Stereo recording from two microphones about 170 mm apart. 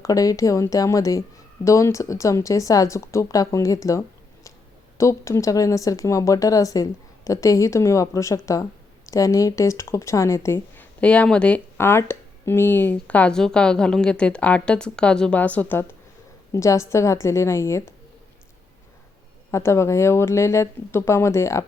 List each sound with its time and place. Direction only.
0.0 s speech: 20° left (ahead or behind)
19.5 s speech: 15° left (ahead or behind)